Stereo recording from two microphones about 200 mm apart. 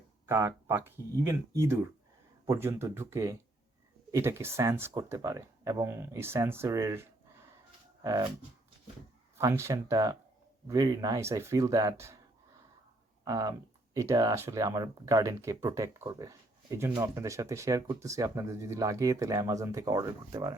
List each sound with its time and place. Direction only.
0.3 s speech: 15° right (ahead or behind)
9.4 s speech: 15° right (ahead or behind)
13.2 s speech: 20° right (ahead or behind)